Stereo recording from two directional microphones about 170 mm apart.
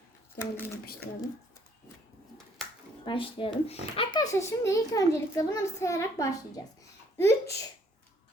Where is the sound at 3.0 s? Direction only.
30° left (ahead or behind).